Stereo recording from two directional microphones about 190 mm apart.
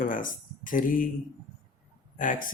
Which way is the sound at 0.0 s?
45° left (ahead or behind).